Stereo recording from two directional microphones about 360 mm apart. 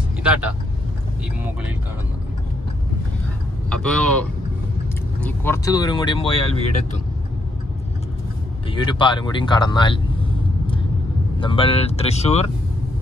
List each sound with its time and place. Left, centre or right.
0.2 s speech: centre
3.7 s speech: centre
8.6 s speech: centre
11.3 s speech: centre